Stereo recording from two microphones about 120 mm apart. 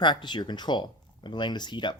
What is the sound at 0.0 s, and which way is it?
Speech, 40° left (ahead or behind).